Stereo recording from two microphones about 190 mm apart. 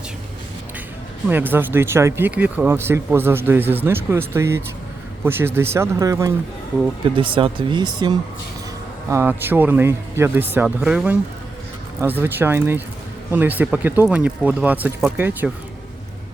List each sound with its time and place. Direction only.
1.3 s speech: 10° right (ahead or behind)